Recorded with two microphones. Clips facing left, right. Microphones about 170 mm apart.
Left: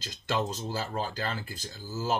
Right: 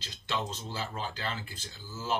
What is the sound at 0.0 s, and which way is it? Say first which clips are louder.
Speech: left 5 dB; 45° left (ahead or behind).